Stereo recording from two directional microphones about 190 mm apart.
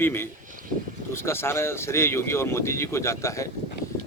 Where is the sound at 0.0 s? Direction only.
10° left (ahead or behind).